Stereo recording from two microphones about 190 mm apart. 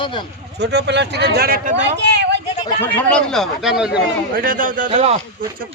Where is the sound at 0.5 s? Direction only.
60° right (ahead or behind); by 1.8 s 45° right (ahead or behind).